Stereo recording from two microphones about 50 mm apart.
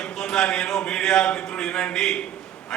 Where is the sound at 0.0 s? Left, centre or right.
Centre.